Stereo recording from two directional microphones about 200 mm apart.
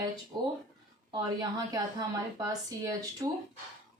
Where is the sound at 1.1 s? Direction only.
20° right (ahead or behind).